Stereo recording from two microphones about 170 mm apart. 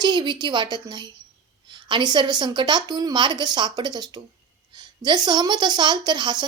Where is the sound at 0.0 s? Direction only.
25° right (ahead or behind).